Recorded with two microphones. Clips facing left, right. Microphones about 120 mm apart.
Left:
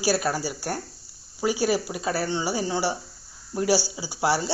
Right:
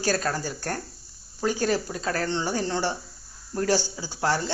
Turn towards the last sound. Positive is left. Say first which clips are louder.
# left 2 dB
turn(degrees=10)  # may be behind; listen again after turning